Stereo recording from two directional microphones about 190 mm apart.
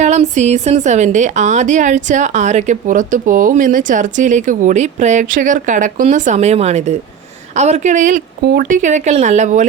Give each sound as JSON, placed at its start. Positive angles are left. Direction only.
{"t": 0.0, "sound": "a woman's voice", "side_deg": -35}
{"t": 8.4, "sound": "speech", "side_deg": -55}
{"t": 8.8, "sound": "a woman's voice", "side_deg": -35}